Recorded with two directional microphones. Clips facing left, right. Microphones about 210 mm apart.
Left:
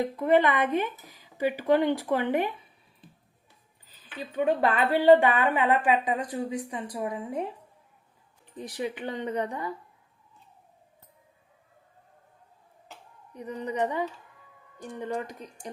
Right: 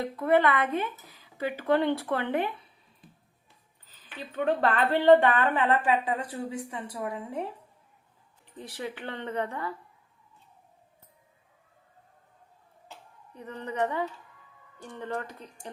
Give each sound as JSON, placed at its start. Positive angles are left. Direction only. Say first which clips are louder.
{"t": 0.0, "sound": "a woman's voice", "louder": "left 1 dB", "side_deg": 15}
{"t": 3.8, "sound": "a woman's voice", "louder": "left 3 dB", "side_deg": 10}
{"t": 8.5, "sound": "a woman's voice", "louder": "left 4 dB", "side_deg": 15}
{"t": 13.3, "sound": "a woman's voice", "louder": "left 3 dB", "side_deg": 15}